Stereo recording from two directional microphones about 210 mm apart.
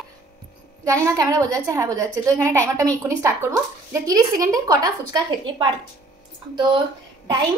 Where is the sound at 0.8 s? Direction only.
15° right (ahead or behind).